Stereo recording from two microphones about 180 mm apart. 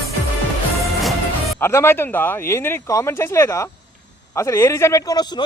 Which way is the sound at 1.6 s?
15° left (ahead or behind).